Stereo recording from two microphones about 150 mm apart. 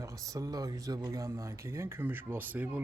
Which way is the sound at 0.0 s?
20° right (ahead or behind).